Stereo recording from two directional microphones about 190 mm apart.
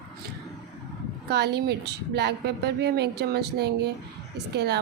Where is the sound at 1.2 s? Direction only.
60° right (ahead or behind).